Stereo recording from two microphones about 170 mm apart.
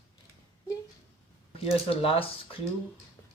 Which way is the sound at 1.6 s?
35° left (ahead or behind).